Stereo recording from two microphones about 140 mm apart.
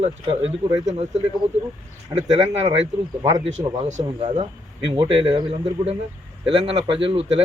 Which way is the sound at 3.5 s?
60° right (ahead or behind).